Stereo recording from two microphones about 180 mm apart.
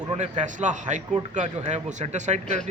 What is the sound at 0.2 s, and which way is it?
Speech, 40° right (ahead or behind).